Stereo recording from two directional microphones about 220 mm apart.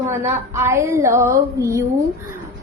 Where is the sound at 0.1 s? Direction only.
10° right (ahead or behind).